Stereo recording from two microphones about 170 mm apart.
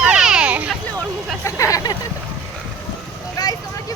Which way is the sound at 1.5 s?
20° left (ahead or behind).